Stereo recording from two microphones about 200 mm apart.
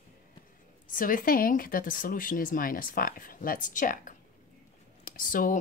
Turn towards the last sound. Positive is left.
turn(degrees=40)  # may be behind; listen again after turning